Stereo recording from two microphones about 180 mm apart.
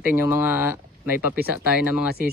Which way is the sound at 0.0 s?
10° right (ahead or behind).